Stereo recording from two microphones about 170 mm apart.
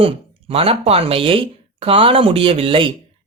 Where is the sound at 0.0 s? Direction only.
35° right (ahead or behind).